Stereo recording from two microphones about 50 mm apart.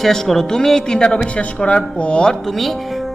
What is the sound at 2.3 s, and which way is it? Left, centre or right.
Speech, centre.